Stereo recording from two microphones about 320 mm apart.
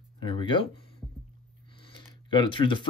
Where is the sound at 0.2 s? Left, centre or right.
Centre.